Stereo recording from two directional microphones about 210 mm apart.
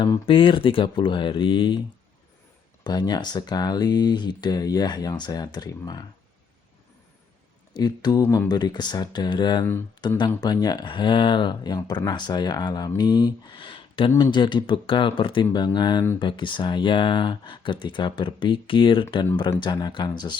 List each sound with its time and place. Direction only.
0.0 s speech: 20° left (ahead or behind)
2.8 s speech: 20° left (ahead or behind)
7.7 s speech: 20° left (ahead or behind)